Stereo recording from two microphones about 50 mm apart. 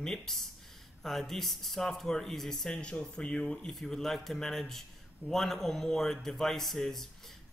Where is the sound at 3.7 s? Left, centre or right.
Centre.